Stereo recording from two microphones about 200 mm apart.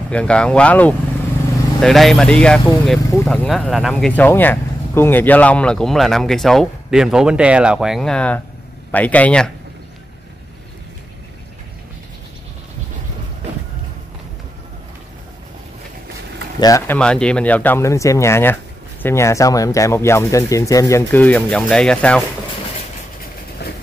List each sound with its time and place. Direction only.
0.1 s speech: 5° left (ahead or behind)
16.5 s speech: 15° left (ahead or behind)
23.6 s train: 55° left (ahead or behind)